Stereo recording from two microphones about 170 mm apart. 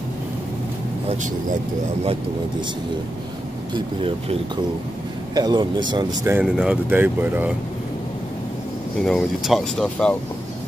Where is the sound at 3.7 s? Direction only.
30° right (ahead or behind).